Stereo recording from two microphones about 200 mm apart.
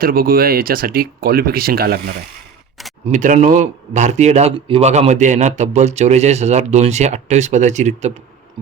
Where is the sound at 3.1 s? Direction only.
40° right (ahead or behind).